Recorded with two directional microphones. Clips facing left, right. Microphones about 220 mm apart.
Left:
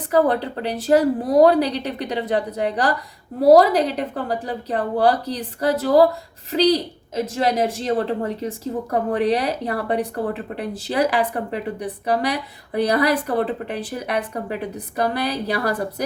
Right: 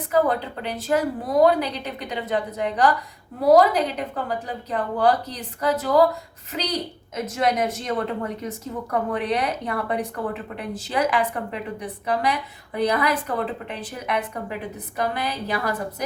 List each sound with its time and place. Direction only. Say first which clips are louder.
0.1 s speech: left 3 dB; 35° left (ahead or behind)